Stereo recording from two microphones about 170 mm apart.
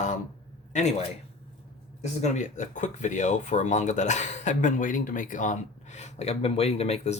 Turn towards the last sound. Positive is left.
turn(degrees=40)  # may be behind; listen again after turning